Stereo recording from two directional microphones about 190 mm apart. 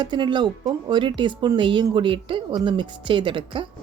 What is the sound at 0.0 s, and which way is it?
Speech, 25° right (ahead or behind).